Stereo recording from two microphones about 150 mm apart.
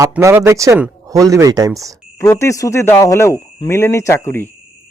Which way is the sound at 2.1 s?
20° left (ahead or behind).